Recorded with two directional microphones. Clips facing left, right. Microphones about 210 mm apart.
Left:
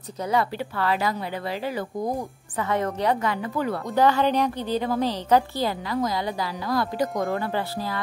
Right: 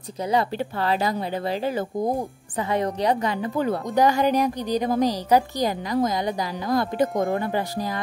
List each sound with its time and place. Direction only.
0.2 s a woman's voice: 20° right (ahead or behind)
2.6 s a woman's voice: 15° right (ahead or behind)